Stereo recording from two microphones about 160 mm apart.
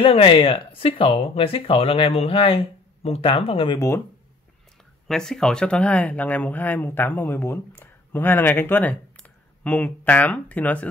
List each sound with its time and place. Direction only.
0.0 s speech: 35° left (ahead or behind)
5.0 s speech: 5° left (ahead or behind)